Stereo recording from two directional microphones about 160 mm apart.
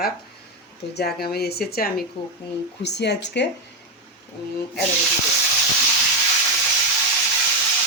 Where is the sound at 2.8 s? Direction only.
90° left.